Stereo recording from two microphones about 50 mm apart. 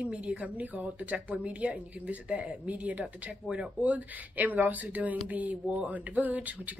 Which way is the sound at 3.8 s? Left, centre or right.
Right.